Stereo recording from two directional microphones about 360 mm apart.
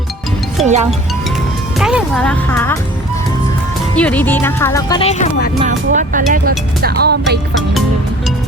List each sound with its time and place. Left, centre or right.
0.6 s speech: centre
1.8 s speech: centre
3.9 s speech: centre
5.5 s speech: right